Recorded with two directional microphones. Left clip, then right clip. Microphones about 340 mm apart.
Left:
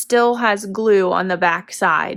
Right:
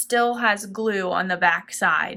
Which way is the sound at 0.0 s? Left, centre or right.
Centre.